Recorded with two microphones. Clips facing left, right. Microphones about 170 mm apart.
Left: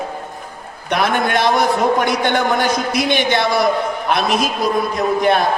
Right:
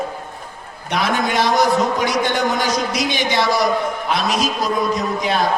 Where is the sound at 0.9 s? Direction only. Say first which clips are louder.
Left 3 dB; 55° left (ahead or behind).